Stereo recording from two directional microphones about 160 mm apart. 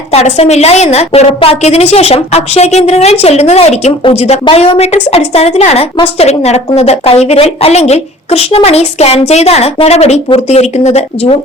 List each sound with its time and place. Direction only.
0.1 s a woman's voice: 40° left (ahead or behind)